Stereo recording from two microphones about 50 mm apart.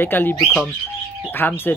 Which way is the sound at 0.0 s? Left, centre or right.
Left.